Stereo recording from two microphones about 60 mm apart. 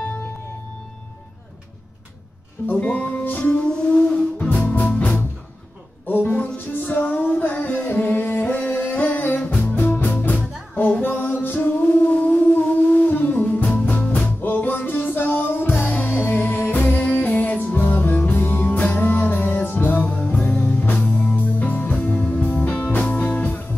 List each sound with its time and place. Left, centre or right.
2.7 s music: left
9.4 s music: left
14.4 s music: left
20.1 s music: left